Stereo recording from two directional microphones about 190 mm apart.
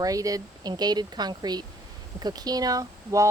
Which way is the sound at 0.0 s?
20° right (ahead or behind).